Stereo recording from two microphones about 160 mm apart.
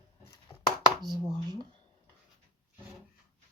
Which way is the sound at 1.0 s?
25° right (ahead or behind).